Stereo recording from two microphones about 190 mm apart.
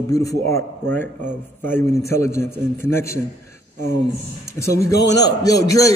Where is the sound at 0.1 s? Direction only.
15° left (ahead or behind).